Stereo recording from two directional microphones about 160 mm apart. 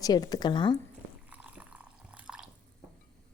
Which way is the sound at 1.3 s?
10° right (ahead or behind).